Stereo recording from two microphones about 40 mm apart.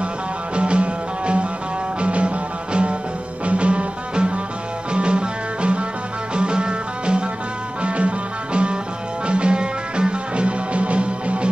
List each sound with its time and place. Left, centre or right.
0.6 s music: right
9.3 s music: right